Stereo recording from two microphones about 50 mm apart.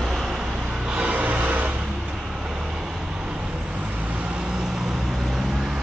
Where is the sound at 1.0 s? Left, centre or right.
Right.